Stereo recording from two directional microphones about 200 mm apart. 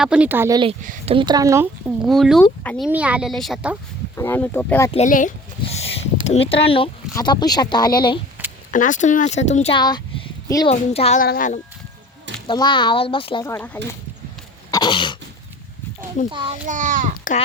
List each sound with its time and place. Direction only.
0.0 s speech: 5° right (ahead or behind); by 0.8 s 20° right (ahead or behind)
0.8 s a child's voice: 40° right (ahead or behind)
1.1 s speech: 20° right (ahead or behind)
2.0 s speech: centre (ahead or behind)
2.8 s speech: 5° right (ahead or behind)
4.2 s speech: 10° left (ahead or behind)
4.9 s speech: 35° left (ahead or behind)
8.7 s speech: 40° left (ahead or behind)
11.2 s speech: 45° left (ahead or behind)
12.5 s speech: 25° left (ahead or behind)
13.4 s speech: 15° left (ahead or behind)
14.7 s throat clearing: 20° left (ahead or behind)
16.3 s speech: 25° right (ahead or behind)
16.6 s a child's voice: 40° right (ahead or behind)